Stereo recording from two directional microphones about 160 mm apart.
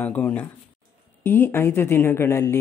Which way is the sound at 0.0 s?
10° left (ahead or behind).